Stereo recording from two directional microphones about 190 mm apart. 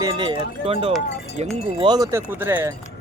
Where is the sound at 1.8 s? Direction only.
20° right (ahead or behind).